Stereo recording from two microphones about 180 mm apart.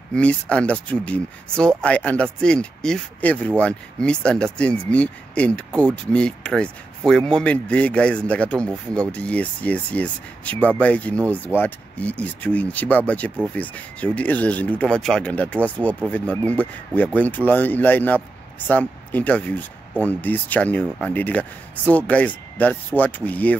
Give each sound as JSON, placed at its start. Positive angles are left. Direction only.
{"t": 0.1, "sound": "speech", "side_deg": 5}